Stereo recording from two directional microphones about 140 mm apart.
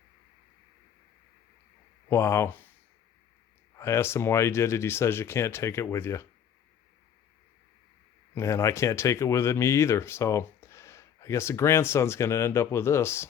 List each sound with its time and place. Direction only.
2.0 s speech: 20° left (ahead or behind)
3.8 s speech: 20° left (ahead or behind)
8.4 s speech: 20° left (ahead or behind)